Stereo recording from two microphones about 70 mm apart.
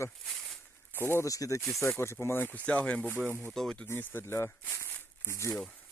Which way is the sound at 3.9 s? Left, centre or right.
Left.